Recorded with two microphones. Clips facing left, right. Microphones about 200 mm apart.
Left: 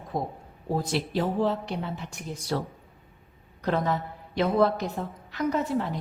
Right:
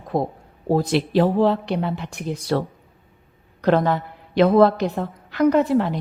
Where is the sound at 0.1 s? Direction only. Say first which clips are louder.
Right 8 dB; 75° right (ahead or behind).